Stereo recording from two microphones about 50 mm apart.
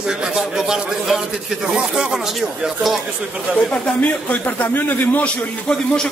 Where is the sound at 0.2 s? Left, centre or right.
Centre.